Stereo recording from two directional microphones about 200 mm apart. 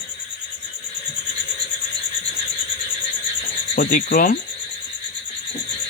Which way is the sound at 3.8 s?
40° left (ahead or behind).